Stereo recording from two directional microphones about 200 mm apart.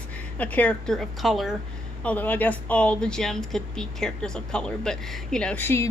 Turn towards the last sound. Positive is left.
turn(degrees=10)  # may be behind; listen again after turning